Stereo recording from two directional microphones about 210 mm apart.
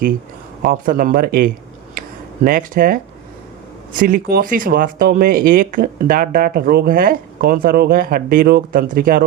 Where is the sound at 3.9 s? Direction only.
45° right (ahead or behind).